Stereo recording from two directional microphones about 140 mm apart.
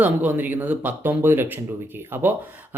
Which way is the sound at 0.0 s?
10° right (ahead or behind).